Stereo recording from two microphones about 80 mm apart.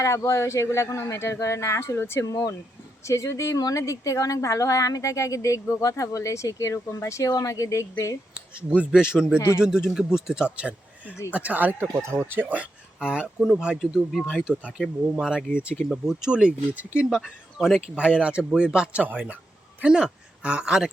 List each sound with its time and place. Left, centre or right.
0.0 s speech: left
2.2 s speech: left
8.7 s speech: centre
11.9 s speech: right; by 17.2 s centre
17.2 s speech: centre